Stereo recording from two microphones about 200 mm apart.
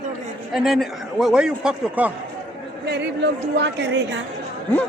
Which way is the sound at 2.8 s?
60° right (ahead or behind).